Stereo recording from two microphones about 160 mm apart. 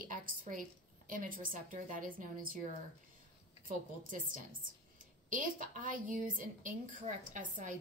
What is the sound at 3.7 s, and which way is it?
A woman's voice, 55° right (ahead or behind).